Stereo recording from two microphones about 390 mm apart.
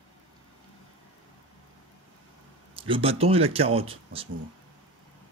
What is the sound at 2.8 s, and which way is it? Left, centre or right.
Speech, centre.